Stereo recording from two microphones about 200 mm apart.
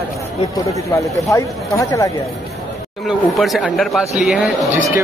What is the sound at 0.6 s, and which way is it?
Speech, 15° left (ahead or behind).